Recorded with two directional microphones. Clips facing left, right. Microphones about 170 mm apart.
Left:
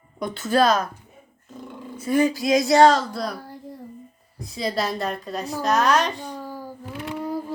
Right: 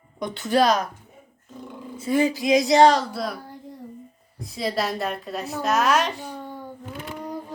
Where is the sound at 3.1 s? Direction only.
5° right (ahead or behind).